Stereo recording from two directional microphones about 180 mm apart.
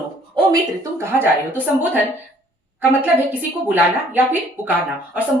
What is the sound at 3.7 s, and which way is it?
Speech, 10° right (ahead or behind).